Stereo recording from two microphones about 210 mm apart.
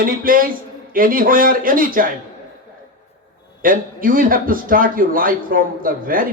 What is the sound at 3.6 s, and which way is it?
A man's voice, 40° right (ahead or behind).